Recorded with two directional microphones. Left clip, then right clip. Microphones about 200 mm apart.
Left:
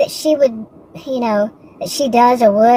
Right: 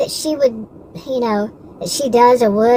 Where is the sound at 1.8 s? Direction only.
20° left (ahead or behind).